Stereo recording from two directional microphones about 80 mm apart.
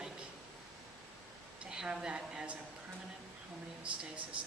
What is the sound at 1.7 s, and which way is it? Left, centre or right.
Speech, centre.